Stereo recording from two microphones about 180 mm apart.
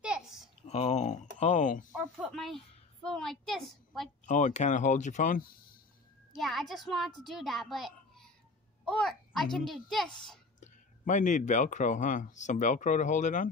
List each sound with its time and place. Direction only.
0.0 s a sound: 5° right (ahead or behind)
0.7 s speech: 35° left (ahead or behind)
2.0 s a woman's voice: centre (ahead or behind)
4.3 s speech: 45° left (ahead or behind)
6.3 s a child's voice: centre (ahead or behind)
10.6 s speech: 45° left (ahead or behind)